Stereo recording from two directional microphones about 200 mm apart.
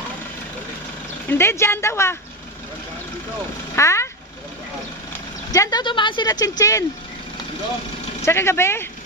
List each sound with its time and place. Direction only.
1.2 s speech: 10° left (ahead or behind)
3.7 s a sound: 15° left (ahead or behind)
5.5 s a woman's voice: 20° left (ahead or behind)
8.3 s speech: 15° left (ahead or behind)